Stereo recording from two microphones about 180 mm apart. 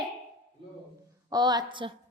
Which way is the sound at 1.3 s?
20° right (ahead or behind).